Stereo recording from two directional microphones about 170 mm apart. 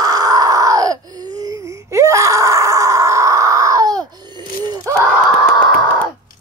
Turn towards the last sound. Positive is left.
turn(degrees=5)  # may be behind; listen again after turning